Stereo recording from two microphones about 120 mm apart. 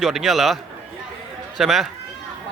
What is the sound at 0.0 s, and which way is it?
Mantra, centre (ahead or behind).